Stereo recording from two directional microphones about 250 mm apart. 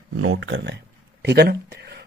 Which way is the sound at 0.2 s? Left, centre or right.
Right.